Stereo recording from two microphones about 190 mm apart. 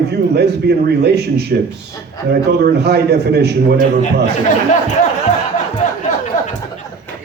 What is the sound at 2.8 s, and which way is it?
A man's voice, 60° right (ahead or behind).